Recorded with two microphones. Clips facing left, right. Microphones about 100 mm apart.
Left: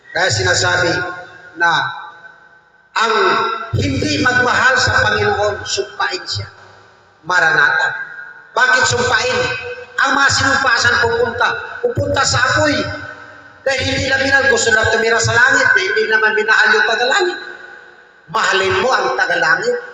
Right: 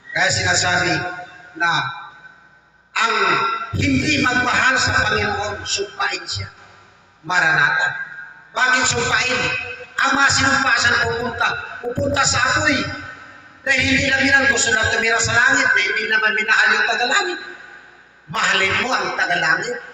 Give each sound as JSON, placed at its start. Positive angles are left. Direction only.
{"t": 0.1, "sound": "a man's voice", "side_deg": 20}
{"t": 2.9, "sound": "a man's voice", "side_deg": 20}